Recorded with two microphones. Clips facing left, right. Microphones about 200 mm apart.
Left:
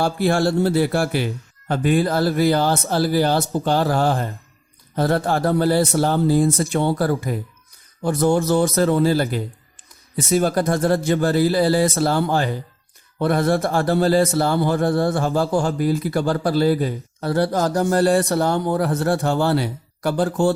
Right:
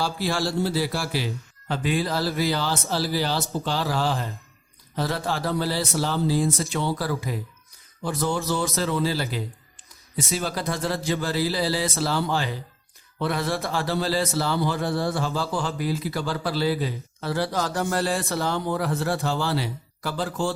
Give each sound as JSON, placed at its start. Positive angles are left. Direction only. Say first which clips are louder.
{"t": 0.0, "sound": "speech", "louder": "left 7 dB", "side_deg": 55}